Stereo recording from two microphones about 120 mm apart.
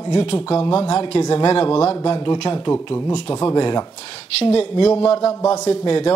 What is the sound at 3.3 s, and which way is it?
Speech, 35° left (ahead or behind).